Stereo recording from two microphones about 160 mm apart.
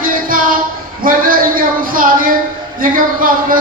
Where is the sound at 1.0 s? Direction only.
60° right (ahead or behind).